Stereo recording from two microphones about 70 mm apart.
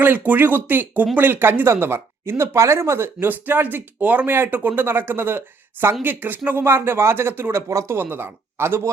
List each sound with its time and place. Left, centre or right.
0.0 s speech: right
3.2 s speech: right
7.7 s speech: right
7.9 s speech: right